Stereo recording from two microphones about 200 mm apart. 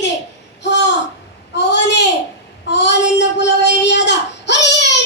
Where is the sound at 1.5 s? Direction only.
60° left (ahead or behind).